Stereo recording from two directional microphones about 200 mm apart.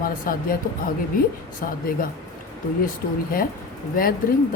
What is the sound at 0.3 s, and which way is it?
Speech, 45° left (ahead or behind).